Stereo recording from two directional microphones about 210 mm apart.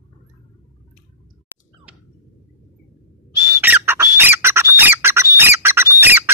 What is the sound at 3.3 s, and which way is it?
Squawk, 10° right (ahead or behind).